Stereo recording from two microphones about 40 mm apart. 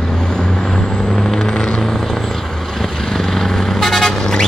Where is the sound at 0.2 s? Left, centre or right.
Centre.